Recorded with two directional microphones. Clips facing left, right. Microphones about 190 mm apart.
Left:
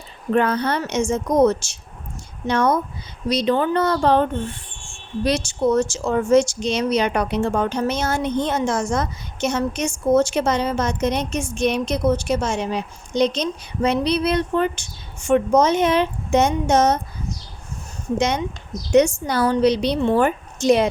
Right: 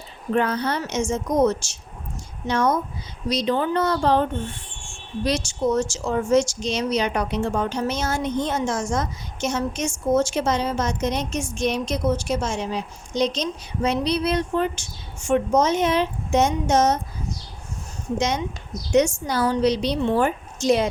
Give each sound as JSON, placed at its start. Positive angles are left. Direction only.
{"t": 0.3, "sound": "speech", "side_deg": 60}
{"t": 18.2, "sound": "speech", "side_deg": 60}